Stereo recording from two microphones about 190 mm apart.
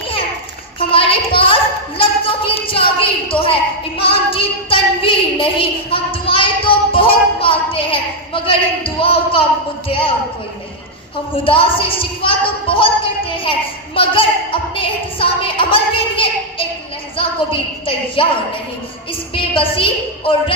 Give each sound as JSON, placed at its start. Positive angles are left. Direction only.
{"t": 0.8, "sound": "a sound", "side_deg": 30}
{"t": 2.0, "sound": "a woman's voice", "side_deg": 30}
{"t": 11.4, "sound": "a woman's voice", "side_deg": 30}
{"t": 19.3, "sound": "a woman's voice", "side_deg": 30}